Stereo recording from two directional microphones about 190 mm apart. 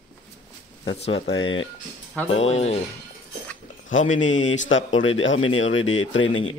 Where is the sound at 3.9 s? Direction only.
90° left.